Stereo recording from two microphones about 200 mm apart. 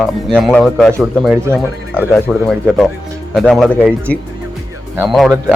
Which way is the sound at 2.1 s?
Centre (ahead or behind).